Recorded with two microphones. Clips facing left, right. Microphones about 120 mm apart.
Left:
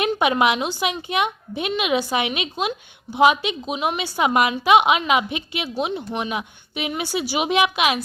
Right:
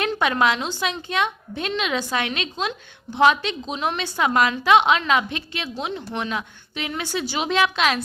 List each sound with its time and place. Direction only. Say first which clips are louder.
0.0 s a woman's voice: left 2 dB; 15° left (ahead or behind)